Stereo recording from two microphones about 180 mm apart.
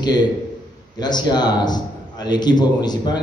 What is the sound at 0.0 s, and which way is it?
A man's voice, 25° left (ahead or behind).